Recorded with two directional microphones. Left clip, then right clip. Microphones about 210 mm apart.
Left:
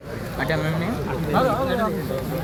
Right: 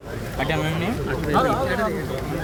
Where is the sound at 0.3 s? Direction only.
70° right (ahead or behind).